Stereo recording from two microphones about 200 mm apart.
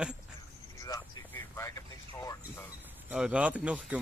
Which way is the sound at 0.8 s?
15° left (ahead or behind).